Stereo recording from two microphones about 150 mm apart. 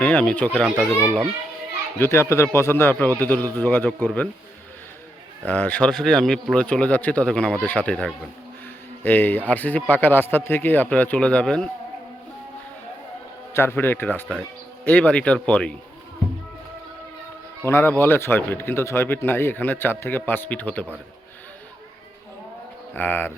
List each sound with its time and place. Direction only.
0.0 s a man's voice: 10° left (ahead or behind)
2.0 s a man's voice: 15° left (ahead or behind)
5.5 s a man's voice: 10° left (ahead or behind)
13.5 s a man's voice: 15° left (ahead or behind)
17.7 s a man's voice: 15° left (ahead or behind)
23.0 s a man's voice: 15° left (ahead or behind)